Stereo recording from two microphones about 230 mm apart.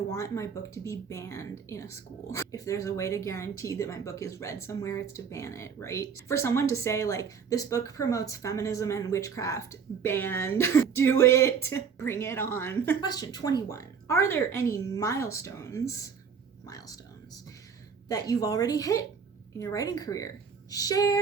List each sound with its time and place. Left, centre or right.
0.1 s speech: centre
18.1 s speech: centre